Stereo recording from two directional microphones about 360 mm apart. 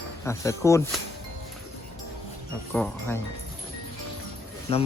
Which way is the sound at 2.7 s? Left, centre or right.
Centre.